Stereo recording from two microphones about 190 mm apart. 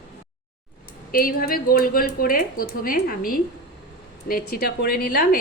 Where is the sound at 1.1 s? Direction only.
50° left (ahead or behind).